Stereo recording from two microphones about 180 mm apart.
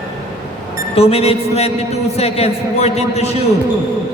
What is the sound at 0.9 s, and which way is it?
A man's voice, 35° left (ahead or behind).